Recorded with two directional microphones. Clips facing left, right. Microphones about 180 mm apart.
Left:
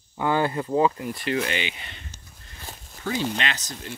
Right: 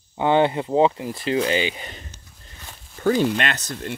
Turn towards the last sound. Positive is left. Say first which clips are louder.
# right 4 dB
turn(degrees=-60)  # may be behind; listen again after turning